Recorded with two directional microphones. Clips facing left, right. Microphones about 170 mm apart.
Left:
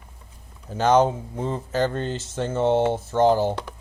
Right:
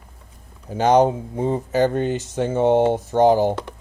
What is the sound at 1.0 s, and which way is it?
Speech, 60° right (ahead or behind).